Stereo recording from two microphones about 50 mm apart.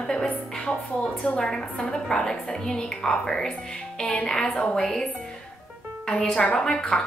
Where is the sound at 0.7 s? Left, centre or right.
Centre.